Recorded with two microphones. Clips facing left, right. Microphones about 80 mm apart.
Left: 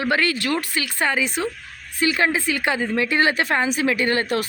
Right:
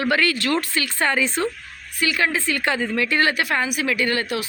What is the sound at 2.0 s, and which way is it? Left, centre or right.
Speech, left.